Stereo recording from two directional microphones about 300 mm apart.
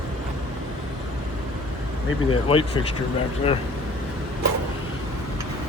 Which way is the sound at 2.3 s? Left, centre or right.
Centre.